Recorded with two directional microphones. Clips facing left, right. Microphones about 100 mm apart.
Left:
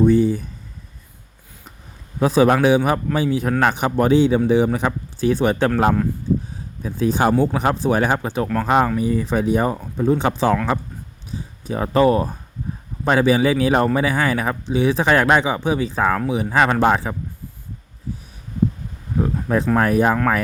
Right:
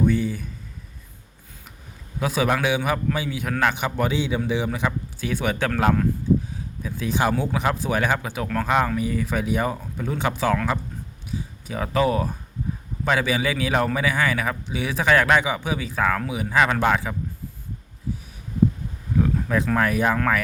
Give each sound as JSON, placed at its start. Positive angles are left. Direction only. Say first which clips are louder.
{"t": 0.0, "sound": "speech", "louder": "left 7 dB", "side_deg": 35}
{"t": 2.1, "sound": "speech", "louder": "left 7 dB", "side_deg": 35}
{"t": 6.8, "sound": "speech", "louder": "left 5 dB", "side_deg": 35}
{"t": 19.2, "sound": "speech", "louder": "left 3 dB", "side_deg": 35}